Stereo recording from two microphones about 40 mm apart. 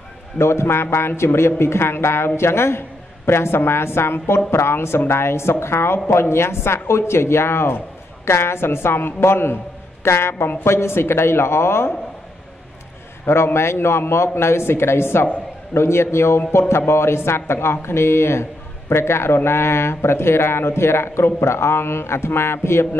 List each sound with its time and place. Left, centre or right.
0.4 s a man's voice: left
8.4 s a man's voice: left
13.2 s a man's voice: left